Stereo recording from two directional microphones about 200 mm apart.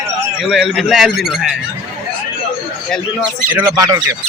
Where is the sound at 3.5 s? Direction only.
15° right (ahead or behind).